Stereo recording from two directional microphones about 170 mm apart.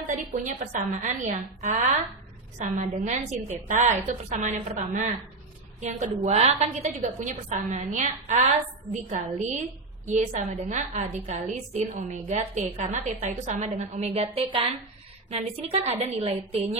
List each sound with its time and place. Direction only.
0.0 s a woman's voice: 45° right (ahead or behind)
10.0 s a woman's voice: 45° right (ahead or behind)